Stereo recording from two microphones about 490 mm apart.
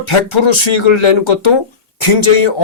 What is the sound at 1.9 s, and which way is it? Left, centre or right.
Speech, left.